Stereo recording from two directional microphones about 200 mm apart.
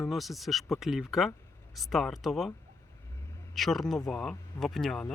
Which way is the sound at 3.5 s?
Centre (ahead or behind).